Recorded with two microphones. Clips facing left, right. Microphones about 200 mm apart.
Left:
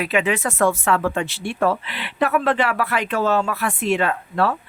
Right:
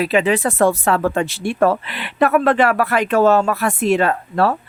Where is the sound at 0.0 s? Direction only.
35° right (ahead or behind).